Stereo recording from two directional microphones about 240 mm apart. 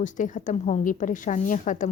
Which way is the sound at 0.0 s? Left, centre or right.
Left.